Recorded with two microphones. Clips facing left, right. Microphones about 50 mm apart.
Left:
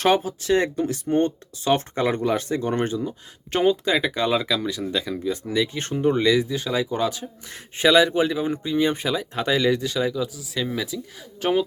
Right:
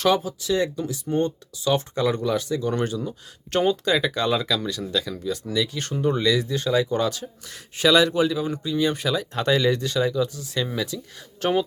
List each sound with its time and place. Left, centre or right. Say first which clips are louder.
0.0 s speech: left 1 dB; left
3.0 s speech: left 2 dB; centre